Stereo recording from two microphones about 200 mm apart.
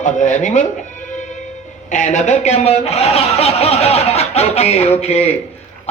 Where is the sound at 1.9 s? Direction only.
40° left (ahead or behind).